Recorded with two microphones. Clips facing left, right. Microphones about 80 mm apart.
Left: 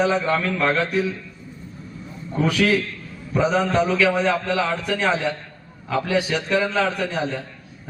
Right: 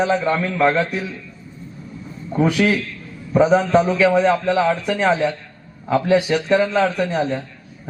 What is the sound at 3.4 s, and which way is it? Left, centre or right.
A man's voice, right.